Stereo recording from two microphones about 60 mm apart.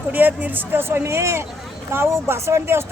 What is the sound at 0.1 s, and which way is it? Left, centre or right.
Speech, right.